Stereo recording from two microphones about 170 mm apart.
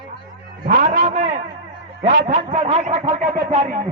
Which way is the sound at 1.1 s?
45° right (ahead or behind).